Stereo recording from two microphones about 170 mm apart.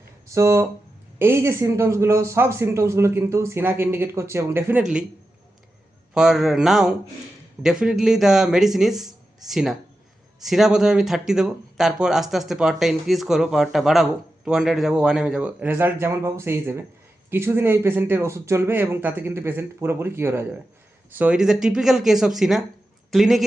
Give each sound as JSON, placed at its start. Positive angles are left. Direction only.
{"t": 0.3, "sound": "a man's voice", "side_deg": -20}
{"t": 6.1, "sound": "a man's voice", "side_deg": -5}